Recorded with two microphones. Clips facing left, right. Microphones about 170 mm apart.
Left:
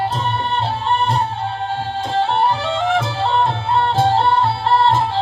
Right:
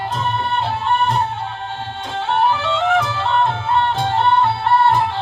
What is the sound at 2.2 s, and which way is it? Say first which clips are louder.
Music: right 1 dB; 35° left (ahead or behind).